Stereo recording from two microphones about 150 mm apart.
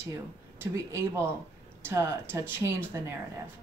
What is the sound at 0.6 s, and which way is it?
Speech, 15° right (ahead or behind).